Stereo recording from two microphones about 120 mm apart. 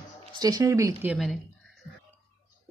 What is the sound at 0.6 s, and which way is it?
Speech, 20° right (ahead or behind).